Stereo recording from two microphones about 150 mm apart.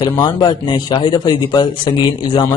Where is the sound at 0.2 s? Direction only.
30° left (ahead or behind).